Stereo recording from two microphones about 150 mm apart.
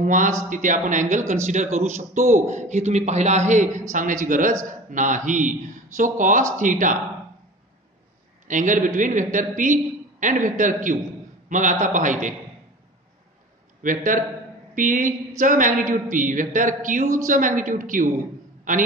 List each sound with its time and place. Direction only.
0.0 s a man's voice: 60° right (ahead or behind)
8.5 s a woman's voice: 60° right (ahead or behind)
13.8 s a woman's voice: 60° right (ahead or behind)
18.6 s a sound: 60° right (ahead or behind)